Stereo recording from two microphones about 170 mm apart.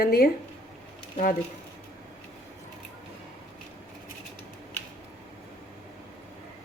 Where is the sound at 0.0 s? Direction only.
65° left (ahead or behind).